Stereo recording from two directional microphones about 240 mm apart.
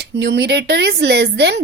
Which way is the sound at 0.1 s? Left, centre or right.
Right.